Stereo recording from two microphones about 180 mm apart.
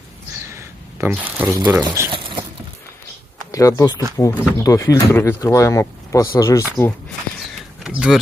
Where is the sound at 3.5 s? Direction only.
15° left (ahead or behind).